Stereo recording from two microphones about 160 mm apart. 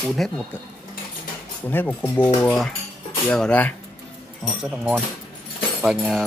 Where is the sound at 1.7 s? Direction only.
10° left (ahead or behind).